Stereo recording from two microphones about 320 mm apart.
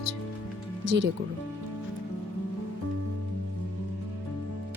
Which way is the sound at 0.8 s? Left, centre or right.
Right.